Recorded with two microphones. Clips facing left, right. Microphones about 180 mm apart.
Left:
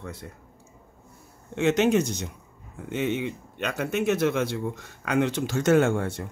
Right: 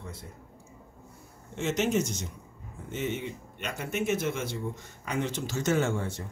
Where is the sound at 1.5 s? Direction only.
65° left (ahead or behind).